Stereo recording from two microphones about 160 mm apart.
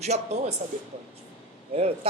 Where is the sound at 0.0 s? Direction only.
45° right (ahead or behind).